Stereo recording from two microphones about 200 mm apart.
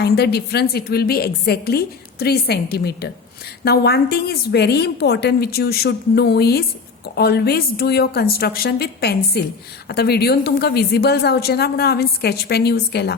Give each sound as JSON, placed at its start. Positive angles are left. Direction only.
{"t": 0.0, "sound": "a woman's voice", "side_deg": 55}